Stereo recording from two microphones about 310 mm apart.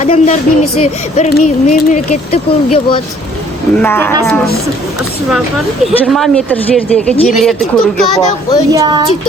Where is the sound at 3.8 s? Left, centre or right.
Centre.